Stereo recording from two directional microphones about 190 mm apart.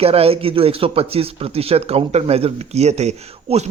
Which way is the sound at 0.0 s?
30° right (ahead or behind).